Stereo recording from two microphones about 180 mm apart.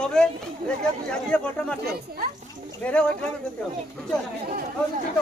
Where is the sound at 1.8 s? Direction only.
60° right (ahead or behind).